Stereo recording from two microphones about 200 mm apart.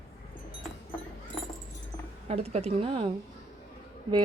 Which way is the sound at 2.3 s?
30° right (ahead or behind).